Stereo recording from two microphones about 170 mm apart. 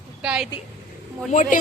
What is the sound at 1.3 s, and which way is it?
Speech, 45° left (ahead or behind).